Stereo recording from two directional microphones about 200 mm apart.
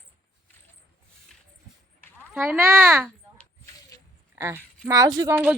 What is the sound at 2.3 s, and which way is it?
Speech, 10° right (ahead or behind).